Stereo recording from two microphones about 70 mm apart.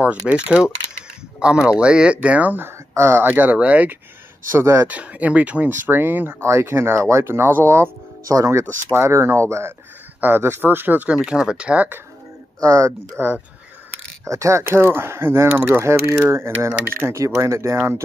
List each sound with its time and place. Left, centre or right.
0.0 s speech: centre
2.9 s speech: right; by 3.9 s centre
4.6 s speech: right
4.8 s speech: right
8.3 s speech: right
8.9 s speech: right
11.1 s speech: centre
12.5 s speech: right
13.2 s speech: right
14.2 s speech: right